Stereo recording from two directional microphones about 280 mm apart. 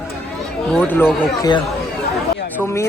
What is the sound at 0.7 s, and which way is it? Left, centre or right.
A man's voice, centre.